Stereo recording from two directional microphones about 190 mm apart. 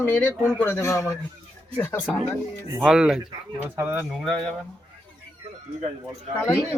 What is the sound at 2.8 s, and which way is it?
Speech, 5° right (ahead or behind).